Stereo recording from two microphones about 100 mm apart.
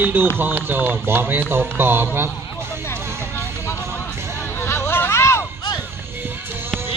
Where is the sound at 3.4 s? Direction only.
30° left (ahead or behind).